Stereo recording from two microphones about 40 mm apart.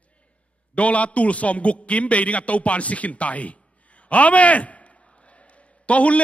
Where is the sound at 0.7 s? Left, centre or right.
Left.